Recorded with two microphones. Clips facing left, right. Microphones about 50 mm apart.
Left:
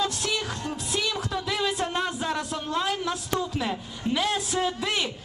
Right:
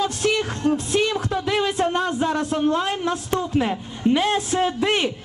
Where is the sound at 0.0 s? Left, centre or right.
Right.